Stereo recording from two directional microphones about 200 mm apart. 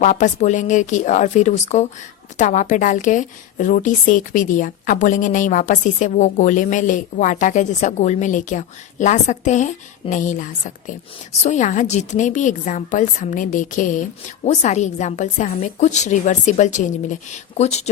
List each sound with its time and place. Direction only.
0.0 s a woman's voice: 40° left (ahead or behind)